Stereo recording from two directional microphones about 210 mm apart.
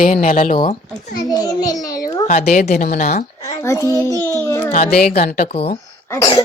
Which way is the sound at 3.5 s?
15° left (ahead or behind).